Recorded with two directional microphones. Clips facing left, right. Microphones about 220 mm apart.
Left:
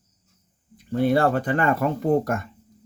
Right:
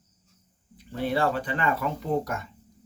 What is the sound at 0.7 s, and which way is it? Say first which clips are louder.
Speech: left 7 dB; 45° left (ahead or behind).